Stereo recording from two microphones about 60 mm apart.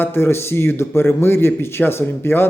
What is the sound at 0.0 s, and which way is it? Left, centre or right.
A man's voice, left.